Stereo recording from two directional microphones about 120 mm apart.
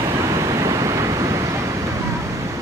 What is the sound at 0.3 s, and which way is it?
Waves, 30° right (ahead or behind).